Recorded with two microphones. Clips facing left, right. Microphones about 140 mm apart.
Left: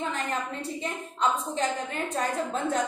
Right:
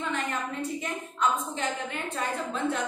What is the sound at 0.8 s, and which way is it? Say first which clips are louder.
A woman's voice: left 3 dB; 35° left (ahead or behind).